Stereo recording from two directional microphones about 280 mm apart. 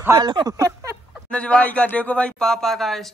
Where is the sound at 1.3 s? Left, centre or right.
Centre.